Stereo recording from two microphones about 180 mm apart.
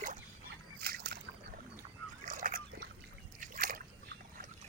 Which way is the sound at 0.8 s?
55° right (ahead or behind).